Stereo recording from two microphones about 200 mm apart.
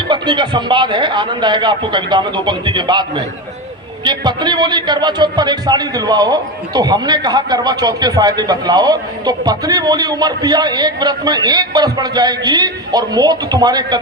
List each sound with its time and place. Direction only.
0.1 s a man's voice: 25° right (ahead or behind)